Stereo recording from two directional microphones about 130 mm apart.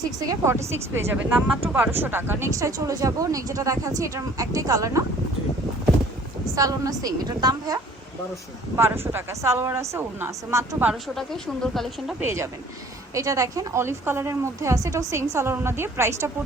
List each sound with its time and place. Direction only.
0.2 s speech: 25° right (ahead or behind)
6.6 s speech: 25° right (ahead or behind)
8.7 s speech: 20° right (ahead or behind)
11.1 s speech: 5° left (ahead or behind)
12.2 s speech: 20° right (ahead or behind)